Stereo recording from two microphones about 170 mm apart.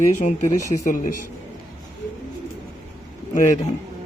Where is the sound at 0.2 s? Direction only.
45° left (ahead or behind).